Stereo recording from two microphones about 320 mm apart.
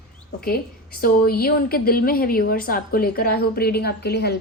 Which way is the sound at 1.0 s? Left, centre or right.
Left.